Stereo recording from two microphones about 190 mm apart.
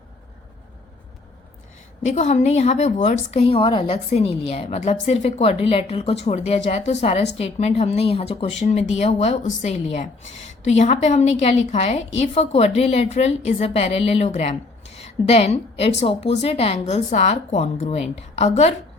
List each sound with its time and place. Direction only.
2.0 s a woman's voice: 35° left (ahead or behind)